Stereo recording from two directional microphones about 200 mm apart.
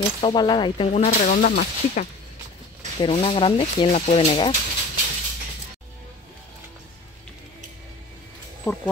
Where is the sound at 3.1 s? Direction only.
30° left (ahead or behind).